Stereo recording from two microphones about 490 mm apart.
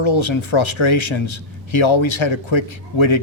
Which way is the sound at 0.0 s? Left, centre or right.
Left.